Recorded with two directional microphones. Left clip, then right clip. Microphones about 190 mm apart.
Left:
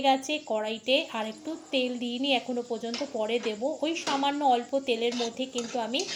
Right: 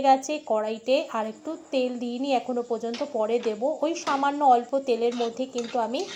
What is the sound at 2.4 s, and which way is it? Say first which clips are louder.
Speech: right 4 dB; 5° right (ahead or behind).